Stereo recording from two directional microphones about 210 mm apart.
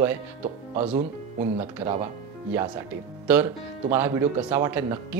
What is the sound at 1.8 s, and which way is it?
Speech, 35° right (ahead or behind).